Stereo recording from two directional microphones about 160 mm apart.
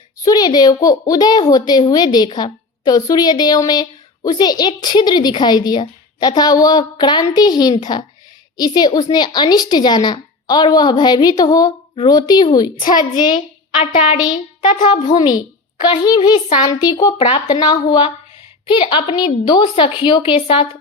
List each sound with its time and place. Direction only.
0.3 s a child's voice: 25° left (ahead or behind)
14.7 s a woman's voice: 50° left (ahead or behind)
15.1 s a child's voice: 25° left (ahead or behind)